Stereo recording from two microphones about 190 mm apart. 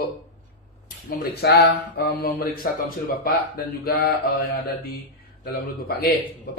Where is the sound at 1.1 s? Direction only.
55° left (ahead or behind).